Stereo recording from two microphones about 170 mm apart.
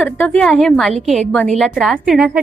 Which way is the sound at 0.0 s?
10° left (ahead or behind).